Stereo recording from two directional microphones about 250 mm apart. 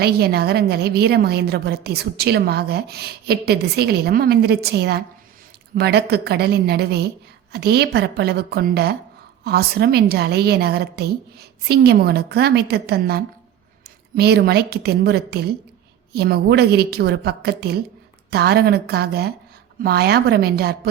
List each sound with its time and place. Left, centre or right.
0.0 s a woman's voice: right